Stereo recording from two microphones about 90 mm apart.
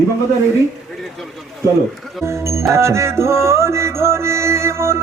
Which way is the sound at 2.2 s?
30° right (ahead or behind).